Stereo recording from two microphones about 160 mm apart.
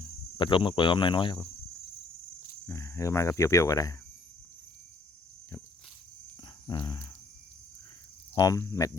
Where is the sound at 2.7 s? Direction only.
20° left (ahead or behind).